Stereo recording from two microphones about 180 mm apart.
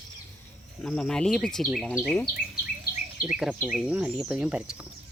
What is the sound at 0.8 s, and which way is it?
Speech, 5° left (ahead or behind).